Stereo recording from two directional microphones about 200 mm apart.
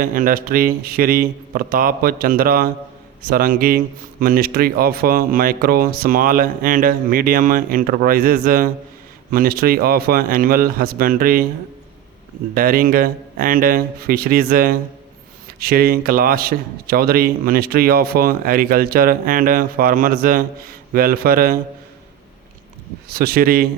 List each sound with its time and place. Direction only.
0.0 s speech: 45° right (ahead or behind)
12.5 s speech: 45° right (ahead or behind)
23.0 s speech: 50° right (ahead or behind)